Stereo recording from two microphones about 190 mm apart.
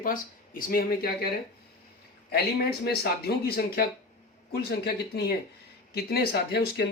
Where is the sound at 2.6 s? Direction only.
55° left (ahead or behind).